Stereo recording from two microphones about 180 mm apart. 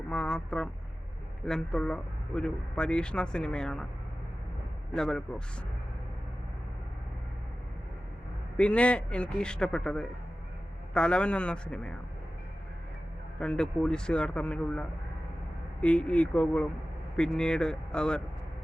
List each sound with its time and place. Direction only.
0.1 s speech: 5° left (ahead or behind)
4.9 s speech: 5° left (ahead or behind)
8.5 s speech: 5° left (ahead or behind)
13.4 s speech: 5° left (ahead or behind)